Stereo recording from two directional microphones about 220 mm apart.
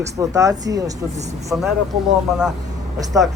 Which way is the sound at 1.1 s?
30° right (ahead or behind).